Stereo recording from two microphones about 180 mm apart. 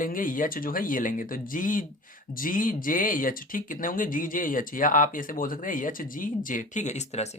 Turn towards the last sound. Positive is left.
turn(degrees=40)  # may be behind; listen again after turning